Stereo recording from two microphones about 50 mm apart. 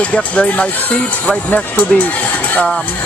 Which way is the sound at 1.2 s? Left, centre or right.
Left.